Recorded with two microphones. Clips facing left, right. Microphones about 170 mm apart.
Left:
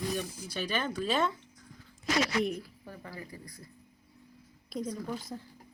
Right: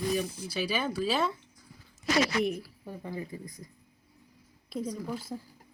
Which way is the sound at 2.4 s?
5° right (ahead or behind).